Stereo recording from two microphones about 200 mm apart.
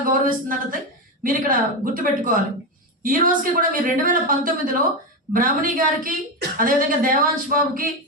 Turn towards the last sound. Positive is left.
turn(degrees=-45)  # may be behind; listen again after turning